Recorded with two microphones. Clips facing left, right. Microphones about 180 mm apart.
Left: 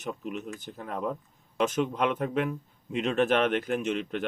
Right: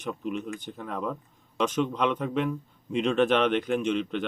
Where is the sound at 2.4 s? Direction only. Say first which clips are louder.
Right 3 dB; 5° left (ahead or behind).